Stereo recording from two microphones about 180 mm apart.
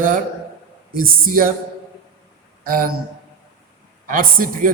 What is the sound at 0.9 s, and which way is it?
Speech, 55° right (ahead or behind).